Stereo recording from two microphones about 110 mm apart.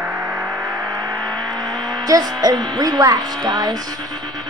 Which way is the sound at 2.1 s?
35° right (ahead or behind).